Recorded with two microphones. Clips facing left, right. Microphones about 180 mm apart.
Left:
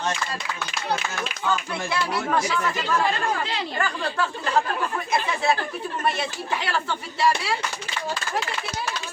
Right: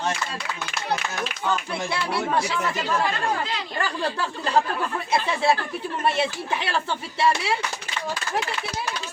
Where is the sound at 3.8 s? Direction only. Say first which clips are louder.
Even; 35° right (ahead or behind).